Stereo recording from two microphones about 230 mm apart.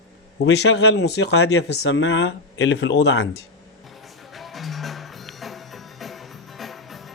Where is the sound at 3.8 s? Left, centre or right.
Centre.